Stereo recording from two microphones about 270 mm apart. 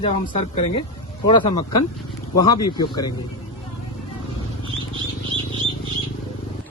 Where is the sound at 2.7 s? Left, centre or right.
Centre.